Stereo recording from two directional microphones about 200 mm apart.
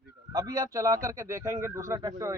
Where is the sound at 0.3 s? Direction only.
20° right (ahead or behind).